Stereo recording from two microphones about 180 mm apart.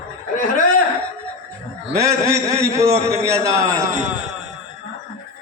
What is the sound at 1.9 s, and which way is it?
A man's voice, 15° right (ahead or behind).